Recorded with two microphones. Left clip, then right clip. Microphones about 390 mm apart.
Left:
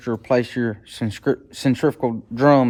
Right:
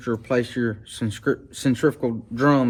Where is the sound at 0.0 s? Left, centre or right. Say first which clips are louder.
Left 3 dB; centre.